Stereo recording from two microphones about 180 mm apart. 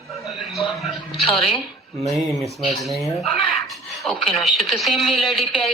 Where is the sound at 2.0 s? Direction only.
Centre (ahead or behind).